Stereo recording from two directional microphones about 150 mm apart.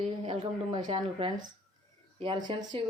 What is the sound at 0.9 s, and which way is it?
Speech, 35° right (ahead or behind).